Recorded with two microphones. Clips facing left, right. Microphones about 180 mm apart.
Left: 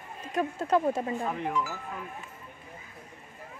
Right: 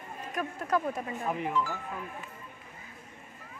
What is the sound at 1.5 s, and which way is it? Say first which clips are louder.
Speech: even; 10° left (ahead or behind).